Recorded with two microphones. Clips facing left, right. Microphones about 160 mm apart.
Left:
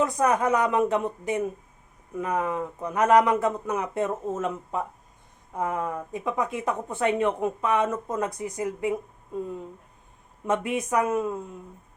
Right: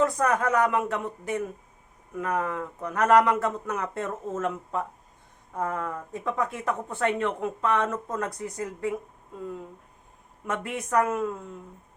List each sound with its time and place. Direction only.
0.0 s speech: 15° left (ahead or behind)
10.4 s speech: 20° left (ahead or behind)